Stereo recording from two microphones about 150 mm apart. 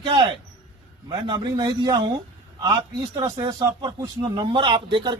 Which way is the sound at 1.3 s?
25° right (ahead or behind).